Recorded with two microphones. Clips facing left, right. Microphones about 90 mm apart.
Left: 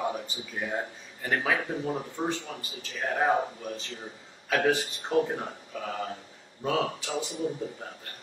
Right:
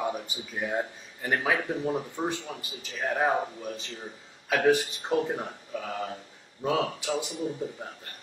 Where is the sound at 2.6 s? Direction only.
15° right (ahead or behind).